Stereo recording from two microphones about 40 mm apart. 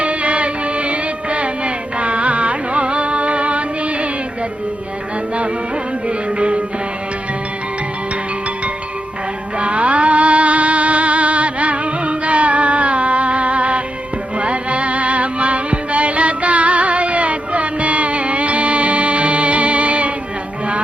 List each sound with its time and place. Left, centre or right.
0.0 s music: right
6.1 s music: right
9.6 s music: right